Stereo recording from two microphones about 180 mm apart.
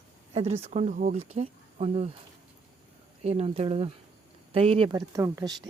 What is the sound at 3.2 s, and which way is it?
Speech, 35° right (ahead or behind).